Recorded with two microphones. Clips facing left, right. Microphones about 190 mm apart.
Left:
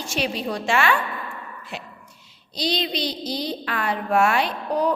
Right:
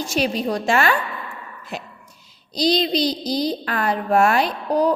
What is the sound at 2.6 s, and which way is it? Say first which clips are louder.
A woman's voice: right 6 dB; 40° right (ahead or behind).